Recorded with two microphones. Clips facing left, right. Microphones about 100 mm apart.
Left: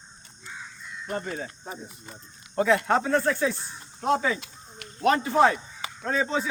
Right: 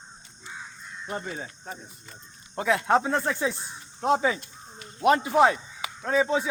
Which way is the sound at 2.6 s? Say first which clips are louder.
Left 1 dB; 10° right (ahead or behind).